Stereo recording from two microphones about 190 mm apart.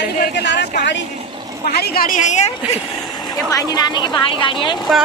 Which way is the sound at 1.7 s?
55° left (ahead or behind).